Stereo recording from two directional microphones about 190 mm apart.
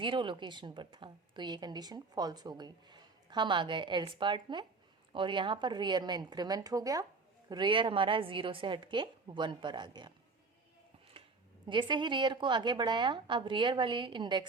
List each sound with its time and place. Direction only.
0.0 s a woman's voice: 25° right (ahead or behind)
11.7 s a woman's voice: 25° right (ahead or behind)